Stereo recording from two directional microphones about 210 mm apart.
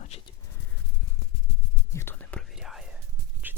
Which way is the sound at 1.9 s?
10° left (ahead or behind).